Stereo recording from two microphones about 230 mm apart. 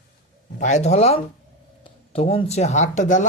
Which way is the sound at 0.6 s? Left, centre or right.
Left.